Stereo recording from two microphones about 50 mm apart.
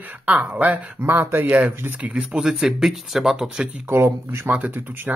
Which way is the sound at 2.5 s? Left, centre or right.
Centre.